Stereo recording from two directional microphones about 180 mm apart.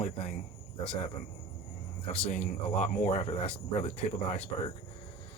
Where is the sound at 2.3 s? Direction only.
40° left (ahead or behind).